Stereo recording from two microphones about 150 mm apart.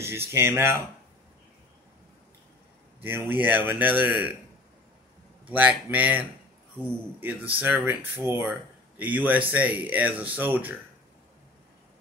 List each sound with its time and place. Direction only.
0.0 s speech: 15° right (ahead or behind)
3.0 s speech: 15° right (ahead or behind)
5.5 s speech: 10° right (ahead or behind)